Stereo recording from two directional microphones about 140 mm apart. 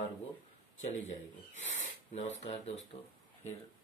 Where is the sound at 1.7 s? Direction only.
55° left (ahead or behind).